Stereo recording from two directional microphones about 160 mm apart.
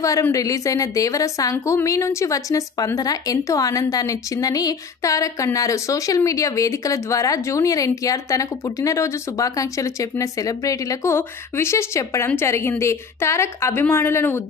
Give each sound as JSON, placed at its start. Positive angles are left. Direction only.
{"t": 0.0, "sound": "a woman's voice", "side_deg": 20}